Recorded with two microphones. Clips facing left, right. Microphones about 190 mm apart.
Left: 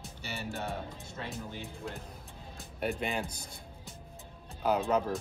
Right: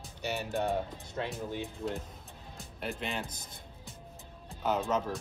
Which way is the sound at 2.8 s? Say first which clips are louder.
Left 4 dB; 50° left (ahead or behind).